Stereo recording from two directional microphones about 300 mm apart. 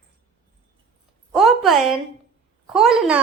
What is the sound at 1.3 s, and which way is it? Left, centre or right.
A woman's voice, centre.